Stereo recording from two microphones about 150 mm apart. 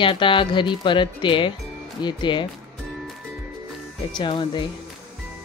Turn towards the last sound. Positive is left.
turn(degrees=30)  # may be behind; listen again after turning